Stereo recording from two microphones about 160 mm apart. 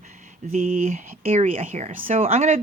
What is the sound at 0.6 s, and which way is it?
Speech, 60° right (ahead or behind).